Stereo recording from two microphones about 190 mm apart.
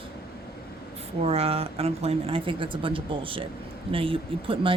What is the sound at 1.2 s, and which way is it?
A woman's voice, 30° right (ahead or behind).